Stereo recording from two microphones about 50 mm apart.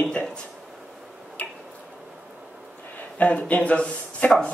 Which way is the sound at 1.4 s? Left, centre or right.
Left.